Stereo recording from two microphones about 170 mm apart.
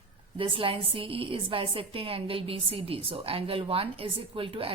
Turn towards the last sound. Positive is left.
turn(degrees=-35)  # may be behind; listen again after turning